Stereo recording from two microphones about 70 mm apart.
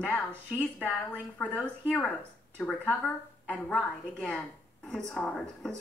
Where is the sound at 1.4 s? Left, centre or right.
Centre.